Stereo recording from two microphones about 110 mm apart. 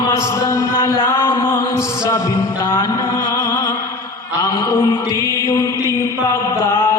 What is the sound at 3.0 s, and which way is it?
Music, 50° left (ahead or behind).